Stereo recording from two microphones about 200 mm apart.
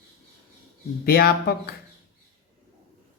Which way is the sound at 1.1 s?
50° left (ahead or behind).